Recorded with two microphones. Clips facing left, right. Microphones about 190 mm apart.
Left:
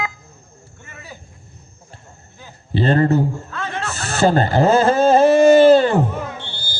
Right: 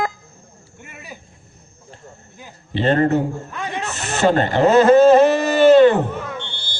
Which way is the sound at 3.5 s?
15° right (ahead or behind).